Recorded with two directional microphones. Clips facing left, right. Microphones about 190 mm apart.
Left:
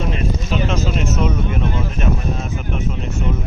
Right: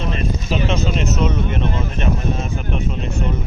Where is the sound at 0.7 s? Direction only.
10° left (ahead or behind).